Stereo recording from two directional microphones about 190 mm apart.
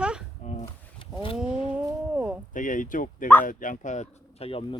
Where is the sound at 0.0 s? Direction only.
5° right (ahead or behind).